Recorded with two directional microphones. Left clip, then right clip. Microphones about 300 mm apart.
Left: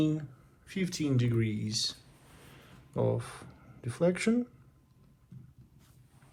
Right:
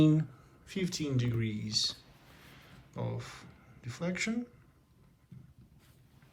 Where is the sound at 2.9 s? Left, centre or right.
Centre.